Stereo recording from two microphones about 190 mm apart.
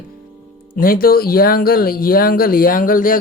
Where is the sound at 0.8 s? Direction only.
50° left (ahead or behind).